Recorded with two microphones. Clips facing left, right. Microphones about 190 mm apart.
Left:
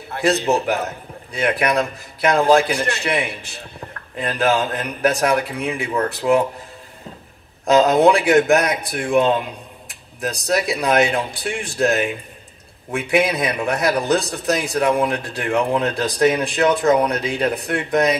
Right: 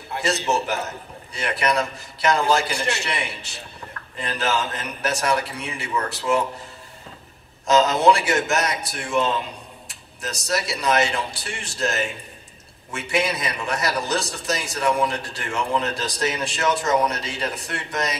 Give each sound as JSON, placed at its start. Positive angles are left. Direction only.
{"t": 0.2, "sound": "a man's voice", "side_deg": 60}
{"t": 7.6, "sound": "a man's voice", "side_deg": 55}